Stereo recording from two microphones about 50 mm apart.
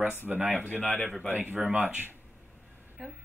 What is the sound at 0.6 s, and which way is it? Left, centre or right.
Speech, left.